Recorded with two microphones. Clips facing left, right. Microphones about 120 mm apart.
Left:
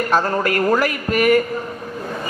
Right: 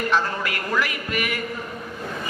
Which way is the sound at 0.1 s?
45° left (ahead or behind).